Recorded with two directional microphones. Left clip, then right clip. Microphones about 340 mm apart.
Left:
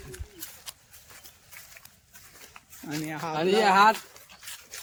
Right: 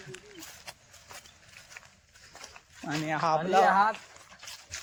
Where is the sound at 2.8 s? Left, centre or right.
Centre.